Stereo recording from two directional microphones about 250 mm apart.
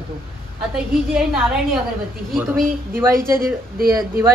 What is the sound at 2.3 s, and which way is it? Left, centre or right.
Speech, centre.